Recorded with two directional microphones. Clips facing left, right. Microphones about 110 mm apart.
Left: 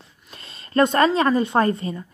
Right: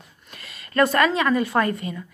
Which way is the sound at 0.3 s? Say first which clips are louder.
Left 6 dB; 30° left (ahead or behind).